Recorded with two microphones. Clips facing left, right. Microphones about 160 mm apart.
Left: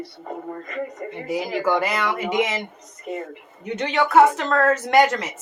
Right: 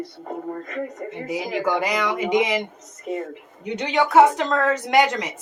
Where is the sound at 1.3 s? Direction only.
15° right (ahead or behind).